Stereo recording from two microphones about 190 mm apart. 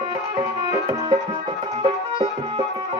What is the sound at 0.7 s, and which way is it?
Music, 20° right (ahead or behind).